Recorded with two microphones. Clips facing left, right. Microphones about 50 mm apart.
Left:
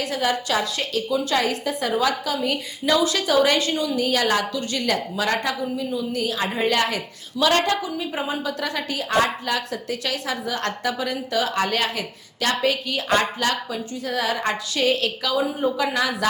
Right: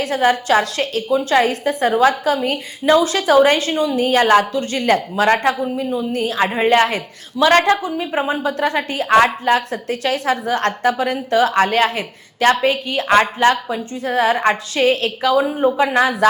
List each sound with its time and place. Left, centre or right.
0.0 s a woman's voice: right